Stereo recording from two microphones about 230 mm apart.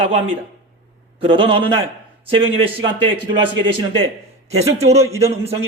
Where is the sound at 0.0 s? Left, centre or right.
Right.